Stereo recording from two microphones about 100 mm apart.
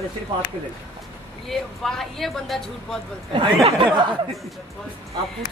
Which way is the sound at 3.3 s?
55° right (ahead or behind).